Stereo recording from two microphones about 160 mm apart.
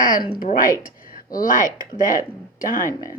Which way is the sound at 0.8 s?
65° left (ahead or behind).